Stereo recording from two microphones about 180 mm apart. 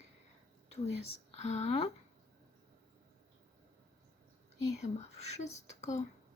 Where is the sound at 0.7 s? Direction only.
35° left (ahead or behind).